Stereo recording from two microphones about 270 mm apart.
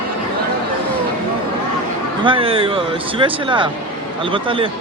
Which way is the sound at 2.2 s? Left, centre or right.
Centre.